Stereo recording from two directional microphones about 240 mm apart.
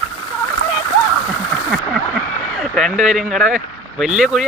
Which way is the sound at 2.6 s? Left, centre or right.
Centre.